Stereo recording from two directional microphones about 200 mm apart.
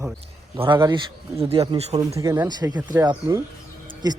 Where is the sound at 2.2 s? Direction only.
15° right (ahead or behind).